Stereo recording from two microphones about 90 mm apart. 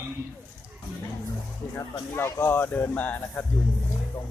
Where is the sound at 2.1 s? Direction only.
25° left (ahead or behind).